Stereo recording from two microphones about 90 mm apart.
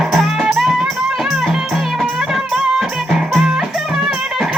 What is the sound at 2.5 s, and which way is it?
Music, 5° right (ahead or behind).